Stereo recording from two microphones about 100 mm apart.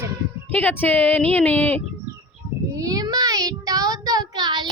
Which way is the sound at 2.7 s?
35° right (ahead or behind).